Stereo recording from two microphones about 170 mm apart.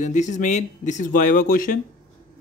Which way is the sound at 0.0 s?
45° left (ahead or behind).